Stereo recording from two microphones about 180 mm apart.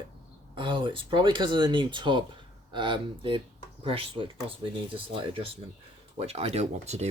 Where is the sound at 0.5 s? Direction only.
25° right (ahead or behind).